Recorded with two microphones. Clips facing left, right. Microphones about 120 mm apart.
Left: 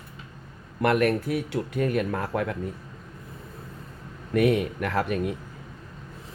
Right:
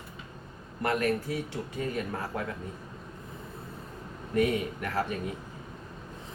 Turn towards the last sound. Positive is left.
turn(degrees=75)  # may be behind; listen again after turning